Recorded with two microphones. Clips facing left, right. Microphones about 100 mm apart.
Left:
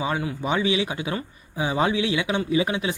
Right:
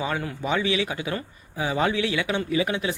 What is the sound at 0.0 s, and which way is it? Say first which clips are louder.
Speech: left 2 dB; 15° left (ahead or behind).